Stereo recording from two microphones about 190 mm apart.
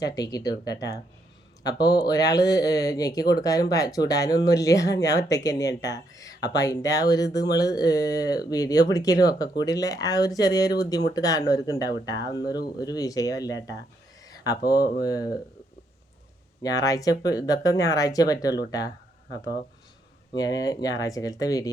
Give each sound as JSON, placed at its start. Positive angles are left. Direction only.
{"t": 0.0, "sound": "speech", "side_deg": 20}
{"t": 14.3, "sound": "a sound", "side_deg": 20}
{"t": 15.0, "sound": "speech", "side_deg": 20}
{"t": 16.6, "sound": "speech", "side_deg": 20}
{"t": 20.3, "sound": "speech", "side_deg": 20}